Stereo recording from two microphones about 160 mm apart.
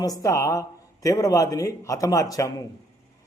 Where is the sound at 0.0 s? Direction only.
20° left (ahead or behind).